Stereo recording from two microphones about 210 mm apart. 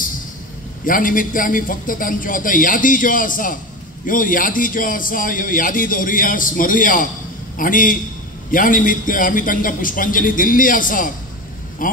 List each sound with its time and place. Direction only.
0.8 s a man's voice: 40° left (ahead or behind)